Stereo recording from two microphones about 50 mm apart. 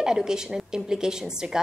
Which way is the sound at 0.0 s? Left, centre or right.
Centre.